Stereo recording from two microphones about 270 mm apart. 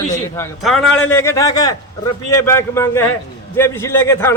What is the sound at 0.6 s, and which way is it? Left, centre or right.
A man's voice, centre.